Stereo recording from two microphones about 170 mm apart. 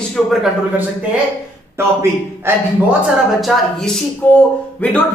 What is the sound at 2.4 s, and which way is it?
Speech, 15° right (ahead or behind).